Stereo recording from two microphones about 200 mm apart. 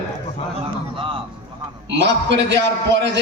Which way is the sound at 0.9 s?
25° right (ahead or behind).